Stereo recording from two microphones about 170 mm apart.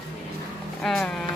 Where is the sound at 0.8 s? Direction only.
5° left (ahead or behind).